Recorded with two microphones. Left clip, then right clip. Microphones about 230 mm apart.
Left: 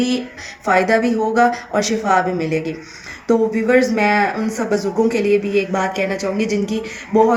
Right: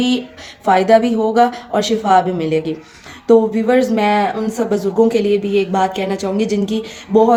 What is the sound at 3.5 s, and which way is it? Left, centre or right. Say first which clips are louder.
Speech: right 1 dB; right.